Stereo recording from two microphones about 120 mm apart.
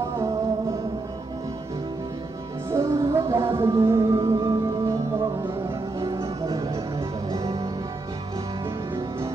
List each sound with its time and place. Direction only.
2.7 s music: 25° right (ahead or behind)
5.9 s music: 30° right (ahead or behind)